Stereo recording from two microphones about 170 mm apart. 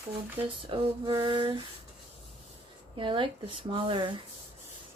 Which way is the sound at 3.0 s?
30° right (ahead or behind).